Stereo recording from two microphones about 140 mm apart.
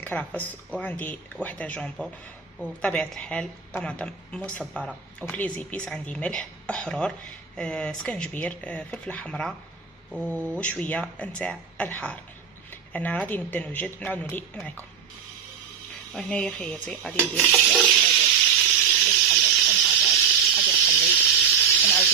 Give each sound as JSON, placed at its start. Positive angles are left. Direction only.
{"t": 0.0, "sound": "speech", "side_deg": 10}
{"t": 10.3, "sound": "speech", "side_deg": -15}
{"t": 10.6, "sound": "speech", "side_deg": 10}
{"t": 16.1, "sound": "speech", "side_deg": 5}
{"t": 17.3, "sound": "a sound", "side_deg": 0}
{"t": 19.3, "sound": "steam", "side_deg": 0}
{"t": 20.0, "sound": "snake", "side_deg": 5}
{"t": 21.2, "sound": "a sound", "side_deg": -10}
{"t": 21.6, "sound": "sizzle", "side_deg": 5}